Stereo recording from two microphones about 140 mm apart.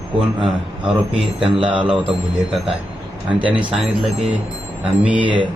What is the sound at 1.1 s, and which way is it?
Speech, 40° right (ahead or behind).